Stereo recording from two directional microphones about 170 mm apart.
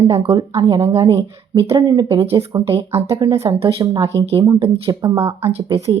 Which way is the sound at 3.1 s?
20° right (ahead or behind).